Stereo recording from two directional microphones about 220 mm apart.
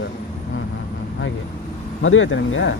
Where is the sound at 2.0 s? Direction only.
65° left (ahead or behind).